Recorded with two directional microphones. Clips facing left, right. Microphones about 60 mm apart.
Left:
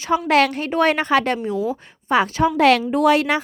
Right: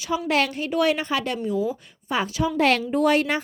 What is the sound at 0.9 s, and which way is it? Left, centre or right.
A woman's voice, left.